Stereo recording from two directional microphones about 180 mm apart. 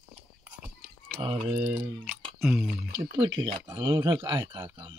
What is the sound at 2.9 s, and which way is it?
Speech, 25° right (ahead or behind).